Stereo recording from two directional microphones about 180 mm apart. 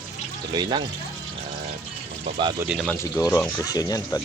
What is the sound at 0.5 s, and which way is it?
Speech, 25° right (ahead or behind).